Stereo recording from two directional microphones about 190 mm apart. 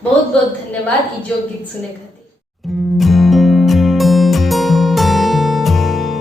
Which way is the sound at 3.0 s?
Centre (ahead or behind).